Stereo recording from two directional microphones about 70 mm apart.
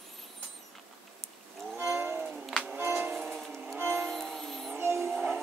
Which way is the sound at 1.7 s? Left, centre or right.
Right.